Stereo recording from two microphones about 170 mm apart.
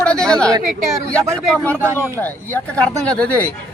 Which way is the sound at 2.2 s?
10° left (ahead or behind).